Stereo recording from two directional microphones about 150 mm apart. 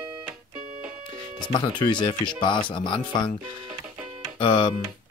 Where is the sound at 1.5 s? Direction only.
35° left (ahead or behind).